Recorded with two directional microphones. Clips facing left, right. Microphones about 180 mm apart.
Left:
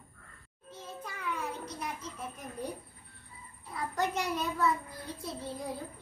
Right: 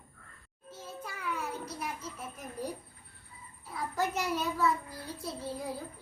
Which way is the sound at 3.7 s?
5° right (ahead or behind).